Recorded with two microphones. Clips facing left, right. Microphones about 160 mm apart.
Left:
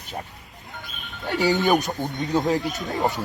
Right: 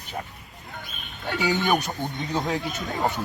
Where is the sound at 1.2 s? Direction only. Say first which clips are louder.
Left 3 dB; 45° left (ahead or behind).